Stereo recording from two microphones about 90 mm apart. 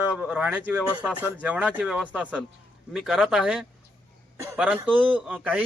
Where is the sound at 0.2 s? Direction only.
15° right (ahead or behind).